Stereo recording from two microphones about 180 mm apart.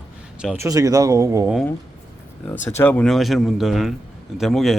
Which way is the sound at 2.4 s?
10° left (ahead or behind).